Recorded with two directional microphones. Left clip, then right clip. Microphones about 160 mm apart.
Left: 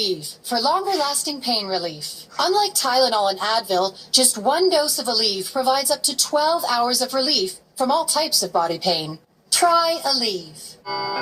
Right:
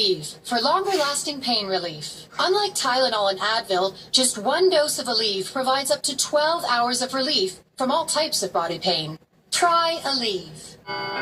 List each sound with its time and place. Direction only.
0.0 s a woman's voice: 30° left (ahead or behind)